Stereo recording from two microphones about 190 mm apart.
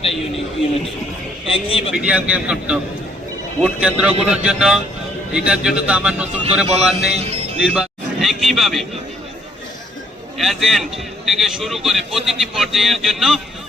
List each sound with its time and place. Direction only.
1.5 s a man's voice: 30° left (ahead or behind)
2.0 s a man's voice: 5° right (ahead or behind)
7.1 s music: 35° right (ahead or behind)
7.6 s speech: 5° right (ahead or behind)
10.3 s a man's voice: centre (ahead or behind)